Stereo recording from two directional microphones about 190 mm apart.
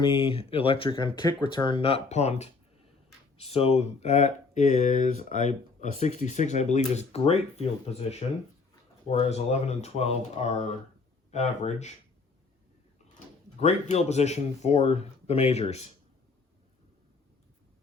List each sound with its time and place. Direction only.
0.0 s speech: 25° left (ahead or behind)
13.1 s speech: 40° left (ahead or behind)